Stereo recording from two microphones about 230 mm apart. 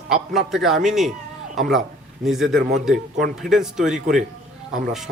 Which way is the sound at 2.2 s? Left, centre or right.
Centre.